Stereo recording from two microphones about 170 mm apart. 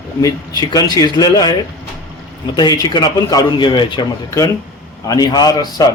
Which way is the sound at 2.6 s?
25° left (ahead or behind).